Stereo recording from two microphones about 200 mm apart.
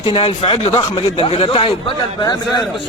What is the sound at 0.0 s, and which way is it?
A man's voice, 25° left (ahead or behind).